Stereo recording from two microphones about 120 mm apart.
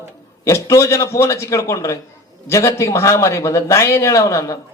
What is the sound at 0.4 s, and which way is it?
A man's voice, 25° left (ahead or behind).